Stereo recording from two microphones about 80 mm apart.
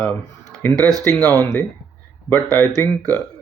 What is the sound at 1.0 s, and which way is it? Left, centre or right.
Speech, left.